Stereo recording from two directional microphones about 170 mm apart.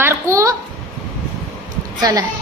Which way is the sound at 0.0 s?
15° right (ahead or behind).